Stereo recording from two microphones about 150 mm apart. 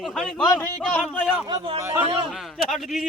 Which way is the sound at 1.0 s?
10° right (ahead or behind).